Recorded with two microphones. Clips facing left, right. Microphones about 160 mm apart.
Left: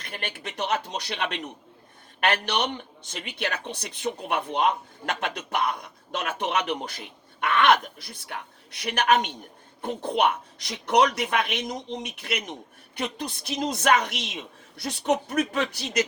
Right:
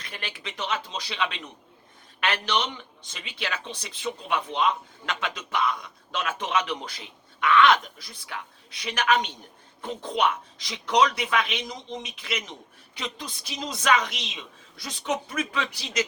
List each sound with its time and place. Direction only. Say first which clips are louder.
0.0 s a man's voice: left 3 dB; 50° left (ahead or behind)